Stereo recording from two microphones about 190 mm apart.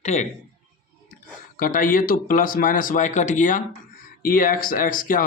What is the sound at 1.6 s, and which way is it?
Speech, 45° left (ahead or behind).